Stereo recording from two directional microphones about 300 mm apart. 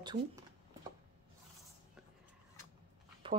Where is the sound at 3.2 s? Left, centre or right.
Centre.